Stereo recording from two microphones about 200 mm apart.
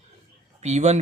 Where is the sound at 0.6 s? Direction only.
35° right (ahead or behind).